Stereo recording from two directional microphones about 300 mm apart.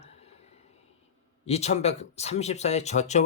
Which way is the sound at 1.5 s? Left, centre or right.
Left.